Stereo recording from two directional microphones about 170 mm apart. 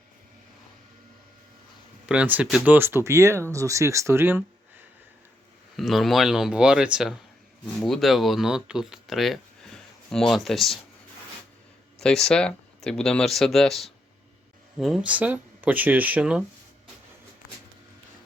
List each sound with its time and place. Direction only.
2.0 s speech: 10° right (ahead or behind)
5.7 s speech: centre (ahead or behind)
11.9 s speech: 5° left (ahead or behind)